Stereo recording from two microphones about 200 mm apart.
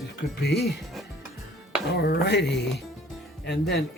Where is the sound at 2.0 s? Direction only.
55° left (ahead or behind).